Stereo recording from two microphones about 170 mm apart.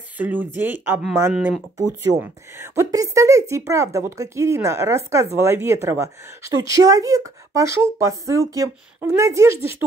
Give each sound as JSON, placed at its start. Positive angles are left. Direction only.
{"t": 0.2, "sound": "a woman's voice", "side_deg": -10}
{"t": 1.8, "sound": "a woman's voice", "side_deg": -15}